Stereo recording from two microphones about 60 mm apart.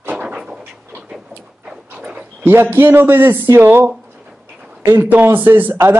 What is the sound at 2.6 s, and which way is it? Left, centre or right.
Speech, right.